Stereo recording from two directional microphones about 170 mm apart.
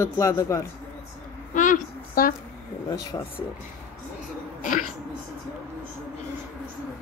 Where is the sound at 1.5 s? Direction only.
50° left (ahead or behind).